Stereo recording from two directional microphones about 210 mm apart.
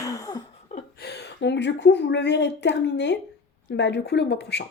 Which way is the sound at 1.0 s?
50° left (ahead or behind).